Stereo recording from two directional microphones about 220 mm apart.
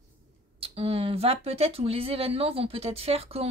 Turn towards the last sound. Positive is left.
turn(degrees=-25)  # may be behind; listen again after turning